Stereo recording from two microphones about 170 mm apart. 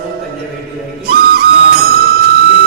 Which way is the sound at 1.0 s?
65° right (ahead or behind).